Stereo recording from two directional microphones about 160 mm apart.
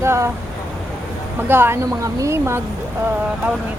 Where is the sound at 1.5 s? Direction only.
15° right (ahead or behind).